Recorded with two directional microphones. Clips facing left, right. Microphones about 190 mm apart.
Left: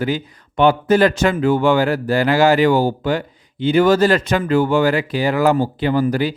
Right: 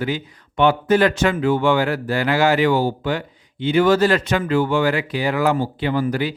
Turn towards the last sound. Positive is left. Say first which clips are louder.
# left 3 dB
turn(degrees=40)  # may be behind; listen again after turning